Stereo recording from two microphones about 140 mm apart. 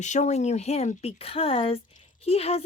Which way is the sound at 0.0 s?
55° left (ahead or behind).